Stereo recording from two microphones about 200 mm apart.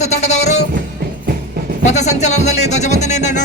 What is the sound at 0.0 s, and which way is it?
Music, 35° left (ahead or behind).